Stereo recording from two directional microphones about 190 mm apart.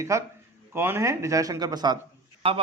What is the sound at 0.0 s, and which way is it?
Speech, 15° right (ahead or behind).